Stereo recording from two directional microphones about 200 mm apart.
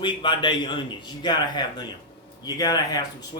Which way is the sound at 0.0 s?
25° left (ahead or behind).